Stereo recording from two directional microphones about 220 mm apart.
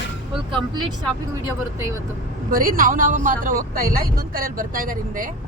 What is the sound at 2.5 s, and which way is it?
Speech, 40° right (ahead or behind).